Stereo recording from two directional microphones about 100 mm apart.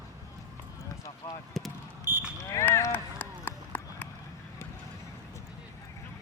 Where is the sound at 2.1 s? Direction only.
20° right (ahead or behind).